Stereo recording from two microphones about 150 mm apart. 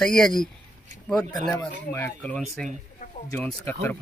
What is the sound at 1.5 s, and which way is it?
Speech, 15° left (ahead or behind).